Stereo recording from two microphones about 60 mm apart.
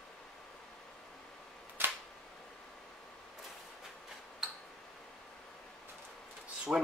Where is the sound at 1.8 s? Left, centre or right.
Right.